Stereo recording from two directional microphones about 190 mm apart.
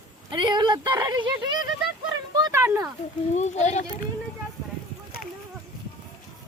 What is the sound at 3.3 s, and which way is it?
Speech, 40° left (ahead or behind).